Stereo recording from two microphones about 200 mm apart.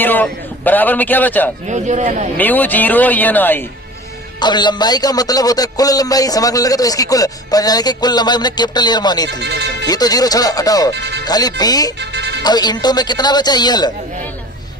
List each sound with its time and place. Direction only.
0.0 s a man's voice: 10° left (ahead or behind)
1.7 s speech: 35° right (ahead or behind)
2.4 s speech: 10° left (ahead or behind)
4.4 s a man's voice: 20° left (ahead or behind)
9.4 s speech: 55° right (ahead or behind)
9.8 s a man's voice: 20° left (ahead or behind)
10.9 s speech: 55° right (ahead or behind)
11.3 s a man's voice: 20° left (ahead or behind)
11.9 s music: 60° right (ahead or behind)
12.4 s a man's voice: 20° left (ahead or behind)